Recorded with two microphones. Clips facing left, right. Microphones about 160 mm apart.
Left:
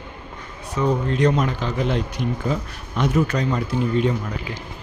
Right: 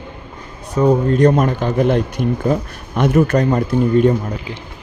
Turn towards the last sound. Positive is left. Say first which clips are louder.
# right 7 dB
turn(degrees=-50)  # may be behind; listen again after turning